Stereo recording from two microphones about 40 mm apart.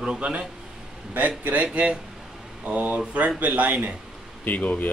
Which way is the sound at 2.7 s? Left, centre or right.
Right.